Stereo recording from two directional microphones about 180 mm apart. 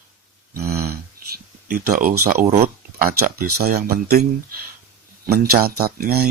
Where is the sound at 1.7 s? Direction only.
50° right (ahead or behind).